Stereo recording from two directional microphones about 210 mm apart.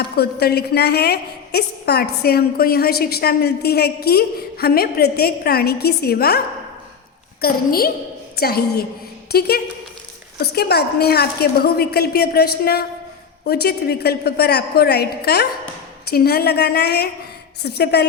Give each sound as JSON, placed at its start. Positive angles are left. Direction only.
{"t": 0.2, "sound": "a woman's voice", "side_deg": 50}
{"t": 7.4, "sound": "a woman's voice", "side_deg": 45}